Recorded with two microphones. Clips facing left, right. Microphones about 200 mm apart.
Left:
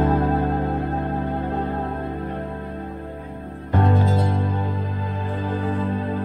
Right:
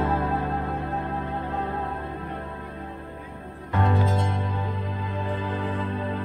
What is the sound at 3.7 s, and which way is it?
Music, 35° left (ahead or behind).